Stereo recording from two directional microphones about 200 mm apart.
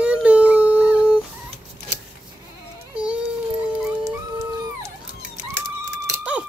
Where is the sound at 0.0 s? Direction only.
5° right (ahead or behind).